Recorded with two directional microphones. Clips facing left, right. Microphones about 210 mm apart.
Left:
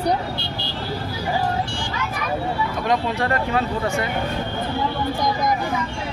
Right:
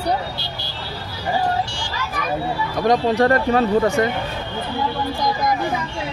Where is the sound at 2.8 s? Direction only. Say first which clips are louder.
Right 7 dB; 40° right (ahead or behind).